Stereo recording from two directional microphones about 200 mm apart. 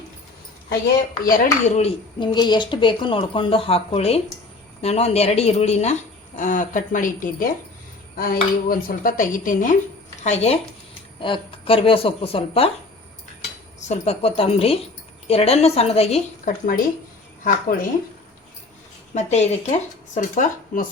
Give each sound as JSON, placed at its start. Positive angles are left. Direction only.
{"t": 1.2, "sound": "speech", "side_deg": 40}
{"t": 13.7, "sound": "speech", "side_deg": 35}
{"t": 16.5, "sound": "speech", "side_deg": 45}
{"t": 19.1, "sound": "speech", "side_deg": 35}